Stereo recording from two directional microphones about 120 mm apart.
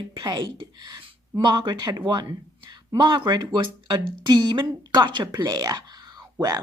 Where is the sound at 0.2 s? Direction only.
40° right (ahead or behind).